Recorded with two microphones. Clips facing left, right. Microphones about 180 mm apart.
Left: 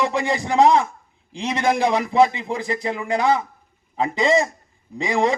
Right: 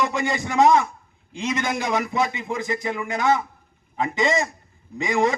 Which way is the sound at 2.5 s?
30° left (ahead or behind).